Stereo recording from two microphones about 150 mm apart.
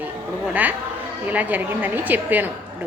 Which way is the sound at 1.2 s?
10° right (ahead or behind).